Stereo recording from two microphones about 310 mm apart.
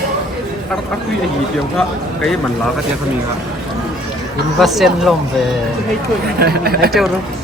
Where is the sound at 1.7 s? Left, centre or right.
Centre.